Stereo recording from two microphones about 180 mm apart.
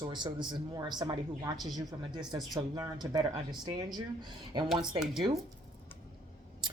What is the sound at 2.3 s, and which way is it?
Speech, 20° right (ahead or behind).